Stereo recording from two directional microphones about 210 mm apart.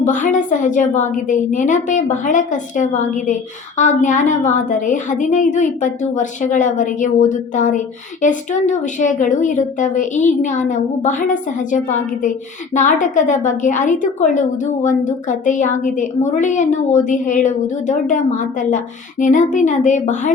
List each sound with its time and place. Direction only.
0.0 s a woman's voice: 35° left (ahead or behind)